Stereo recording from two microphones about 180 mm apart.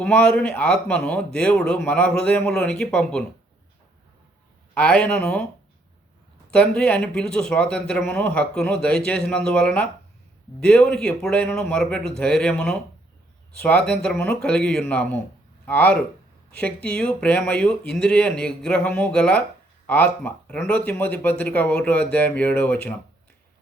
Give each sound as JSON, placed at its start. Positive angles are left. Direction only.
{"t": 0.0, "sound": "speech", "side_deg": 5}
{"t": 4.7, "sound": "speech", "side_deg": 5}
{"t": 6.5, "sound": "speech", "side_deg": 5}